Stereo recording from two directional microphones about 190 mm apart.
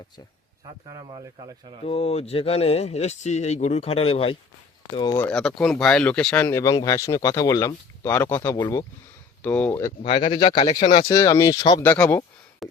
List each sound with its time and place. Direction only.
0.6 s speech: 20° right (ahead or behind)
1.9 s speech: 30° left (ahead or behind)
4.9 s speech: 20° left (ahead or behind)
5.2 s speech: 5° left (ahead or behind); by 8.9 s 20° left (ahead or behind)
9.4 s speech: 10° left (ahead or behind)
10.0 s speech: 30° left (ahead or behind); by 12.6 s 5° left (ahead or behind)